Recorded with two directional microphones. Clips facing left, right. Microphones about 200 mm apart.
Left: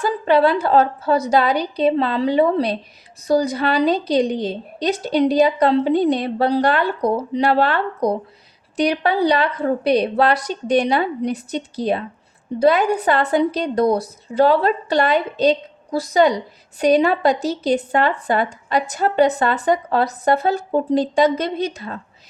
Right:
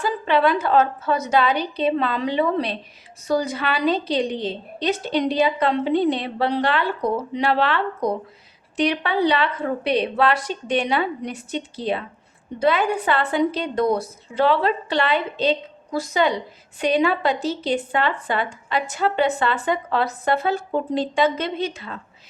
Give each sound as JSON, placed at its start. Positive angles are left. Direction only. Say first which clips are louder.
{"t": 0.0, "sound": "speech", "louder": "left 4 dB", "side_deg": 40}